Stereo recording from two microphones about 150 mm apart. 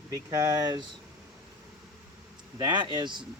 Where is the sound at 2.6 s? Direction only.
30° right (ahead or behind).